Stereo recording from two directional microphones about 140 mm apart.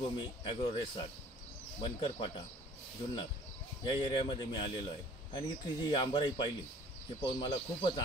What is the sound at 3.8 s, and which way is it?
Speech, 35° left (ahead or behind).